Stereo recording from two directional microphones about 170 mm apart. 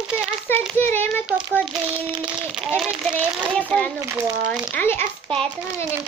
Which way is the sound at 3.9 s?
15° right (ahead or behind).